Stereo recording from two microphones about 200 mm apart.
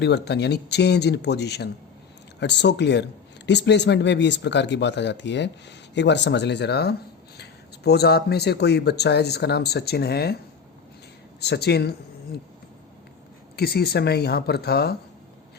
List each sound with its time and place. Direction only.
0.0 s speech: 60° left (ahead or behind)
11.3 s speech: 55° left (ahead or behind)
13.6 s speech: 50° left (ahead or behind)